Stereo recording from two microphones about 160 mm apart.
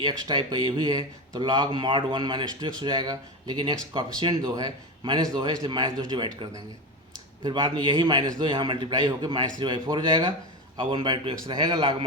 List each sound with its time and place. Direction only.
0.0 s a man's voice: 25° right (ahead or behind)